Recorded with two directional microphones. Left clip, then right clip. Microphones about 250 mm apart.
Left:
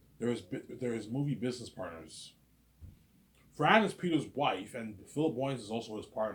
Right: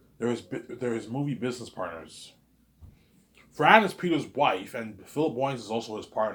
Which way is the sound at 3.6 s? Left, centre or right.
Centre.